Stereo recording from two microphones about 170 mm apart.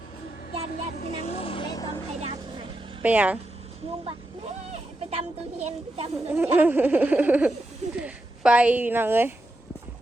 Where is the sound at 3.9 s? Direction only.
35° right (ahead or behind).